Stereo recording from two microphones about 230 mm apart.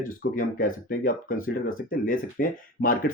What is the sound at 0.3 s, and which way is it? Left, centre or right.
Speech, left.